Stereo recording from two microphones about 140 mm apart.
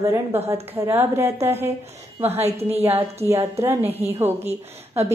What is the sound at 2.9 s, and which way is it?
A woman's voice, 20° right (ahead or behind).